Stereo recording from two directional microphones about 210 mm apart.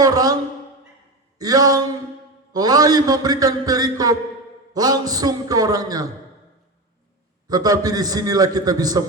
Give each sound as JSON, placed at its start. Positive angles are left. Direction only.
{"t": 0.0, "sound": "a woman's voice", "side_deg": -15}
{"t": 1.4, "sound": "a man's voice", "side_deg": -15}
{"t": 7.4, "sound": "a man's voice", "side_deg": -20}